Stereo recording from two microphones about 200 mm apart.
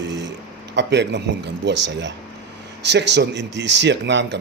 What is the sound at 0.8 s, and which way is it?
Speech, 60° right (ahead or behind).